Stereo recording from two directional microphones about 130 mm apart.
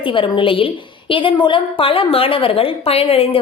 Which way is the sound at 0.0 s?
40° left (ahead or behind).